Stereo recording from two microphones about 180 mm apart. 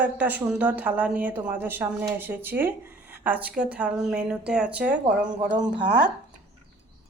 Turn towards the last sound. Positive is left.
turn(degrees=-25)  # may be behind; listen again after turning